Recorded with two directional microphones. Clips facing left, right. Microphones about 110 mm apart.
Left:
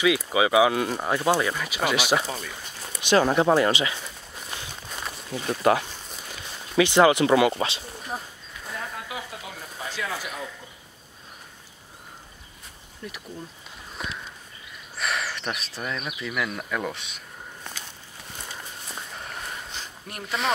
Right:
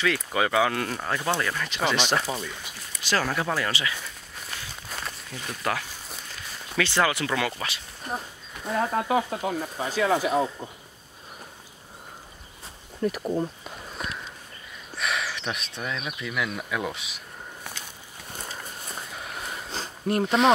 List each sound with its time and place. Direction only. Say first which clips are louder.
0.0 s speech: left 4 dB; 10° left (ahead or behind)
2.2 s speech: right 2 dB; 5° right (ahead or behind)
2.9 s speech: left 6 dB; 20° left (ahead or behind)
4.9 s a sound: even; centre (ahead or behind)
5.3 s speech: left 9 dB; 25° left (ahead or behind)
8.7 s speech: right 12 dB; 40° right (ahead or behind)
10.1 s speech: right 11 dB; 35° right (ahead or behind)
13.0 s speech: right 13 dB; 45° right (ahead or behind)
14.0 s walk: even; centre (ahead or behind)
15.0 s speech: even; centre (ahead or behind)
17.6 s walk: left 1 dB; 10° right (ahead or behind)
19.1 s a sound: even; 5° right (ahead or behind)
19.7 s a sound: right 12 dB; 35° right (ahead or behind)